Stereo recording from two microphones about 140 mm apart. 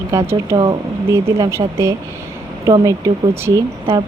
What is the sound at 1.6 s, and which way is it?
Speech, 30° right (ahead or behind).